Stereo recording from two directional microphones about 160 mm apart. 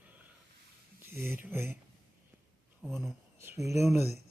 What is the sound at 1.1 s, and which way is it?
Speech, 15° right (ahead or behind).